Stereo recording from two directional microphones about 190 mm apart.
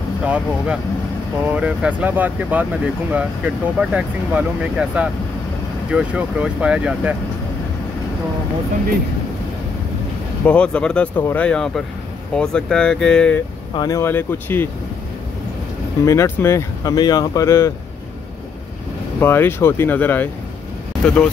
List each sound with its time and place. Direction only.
0.2 s speech: 5° right (ahead or behind)
10.4 s speech: 5° left (ahead or behind)
13.7 s speech: 15° left (ahead or behind)
16.1 s speech: 15° left (ahead or behind)
19.1 s speech: 10° left (ahead or behind)